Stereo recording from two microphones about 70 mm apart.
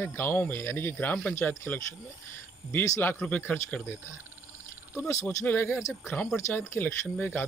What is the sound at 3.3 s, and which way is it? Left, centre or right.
Speech, left.